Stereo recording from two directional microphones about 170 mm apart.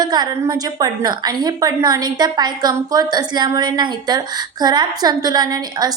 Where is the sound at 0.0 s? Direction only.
25° right (ahead or behind).